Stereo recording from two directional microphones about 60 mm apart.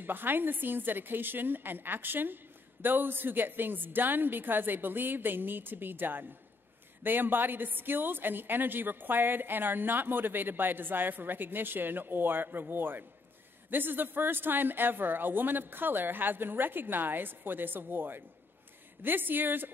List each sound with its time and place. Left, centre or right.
0.0 s a woman's voice: right